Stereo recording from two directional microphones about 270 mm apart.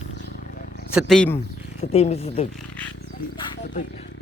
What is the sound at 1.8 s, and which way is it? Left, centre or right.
Speech, left.